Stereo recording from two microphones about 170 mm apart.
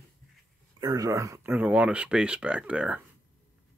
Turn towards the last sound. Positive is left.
turn(degrees=-5)  # may be behind; listen again after turning